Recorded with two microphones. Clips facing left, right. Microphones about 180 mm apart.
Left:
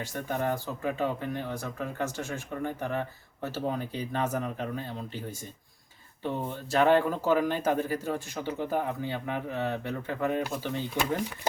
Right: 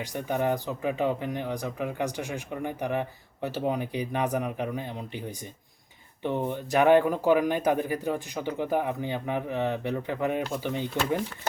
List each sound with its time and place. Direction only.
0.0 s speech: 15° right (ahead or behind)